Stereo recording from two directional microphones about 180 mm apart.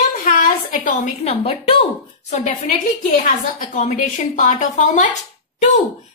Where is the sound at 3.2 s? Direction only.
45° left (ahead or behind).